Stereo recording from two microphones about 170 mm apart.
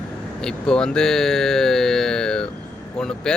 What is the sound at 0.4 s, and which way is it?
Speech, 5° left (ahead or behind).